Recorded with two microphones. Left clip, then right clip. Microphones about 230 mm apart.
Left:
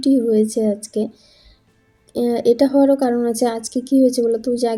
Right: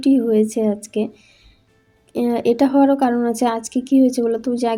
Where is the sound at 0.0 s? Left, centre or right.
Right.